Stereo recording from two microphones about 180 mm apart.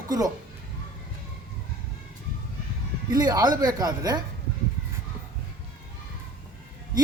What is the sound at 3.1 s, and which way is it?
A man's voice, 20° right (ahead or behind).